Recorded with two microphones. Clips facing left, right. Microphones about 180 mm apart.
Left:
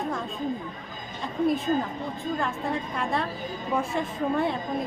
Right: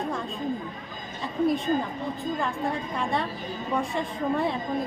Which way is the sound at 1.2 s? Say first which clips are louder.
Even; centre (ahead or behind).